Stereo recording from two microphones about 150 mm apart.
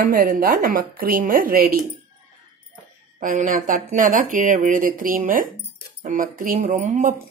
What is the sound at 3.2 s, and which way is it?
Speech, 65° right (ahead or behind).